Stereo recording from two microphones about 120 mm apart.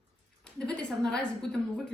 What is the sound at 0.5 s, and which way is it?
Speech, 5° left (ahead or behind).